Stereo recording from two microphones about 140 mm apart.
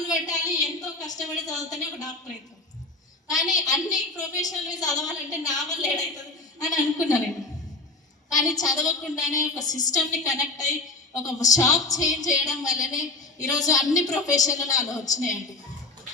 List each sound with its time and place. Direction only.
0.0 s a woman's voice: 25° left (ahead or behind)
3.2 s a woman's voice: 25° left (ahead or behind)
8.3 s a woman's voice: 25° left (ahead or behind)